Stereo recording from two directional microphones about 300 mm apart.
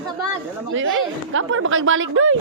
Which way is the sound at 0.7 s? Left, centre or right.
Right.